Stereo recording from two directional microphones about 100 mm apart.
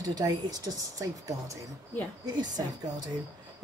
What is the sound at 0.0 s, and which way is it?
Speech, 40° right (ahead or behind).